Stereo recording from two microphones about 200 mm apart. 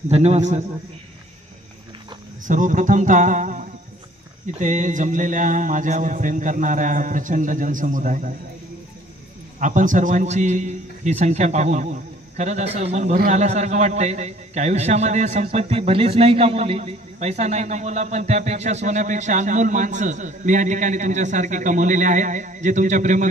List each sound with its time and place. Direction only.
0.1 s a man's voice: 30° right (ahead or behind)
2.4 s a man's voice: 40° right (ahead or behind)
9.6 s a man's voice: 40° right (ahead or behind)